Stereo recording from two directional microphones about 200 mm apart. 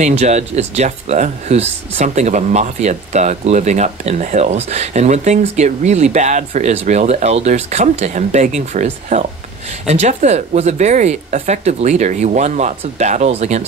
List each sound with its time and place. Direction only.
0.0 s speech: 35° right (ahead or behind)